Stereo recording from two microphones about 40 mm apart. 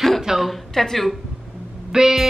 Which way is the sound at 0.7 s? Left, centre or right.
Centre.